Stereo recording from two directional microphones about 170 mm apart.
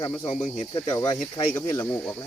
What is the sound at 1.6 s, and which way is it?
Speech, 15° left (ahead or behind).